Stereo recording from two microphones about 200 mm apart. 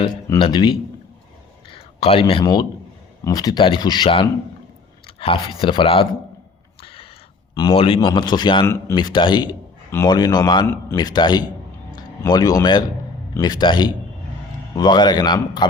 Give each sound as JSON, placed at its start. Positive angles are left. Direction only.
{"t": 0.0, "sound": "a man's voice", "side_deg": 25}
{"t": 6.8, "sound": "a sound", "side_deg": 25}
{"t": 7.5, "sound": "a man's voice", "side_deg": 25}